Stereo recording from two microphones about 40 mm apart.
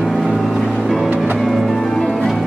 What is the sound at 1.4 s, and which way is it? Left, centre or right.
Music, centre.